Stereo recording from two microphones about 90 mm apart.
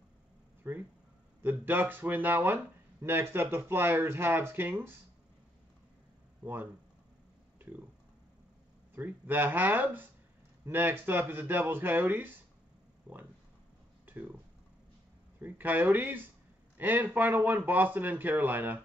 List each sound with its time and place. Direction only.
0.7 s speech: 20° right (ahead or behind)
6.4 s speech: 20° right (ahead or behind)
8.9 s speech: 20° right (ahead or behind)
14.0 s a sound: 20° right (ahead or behind)
15.4 s speech: 20° right (ahead or behind)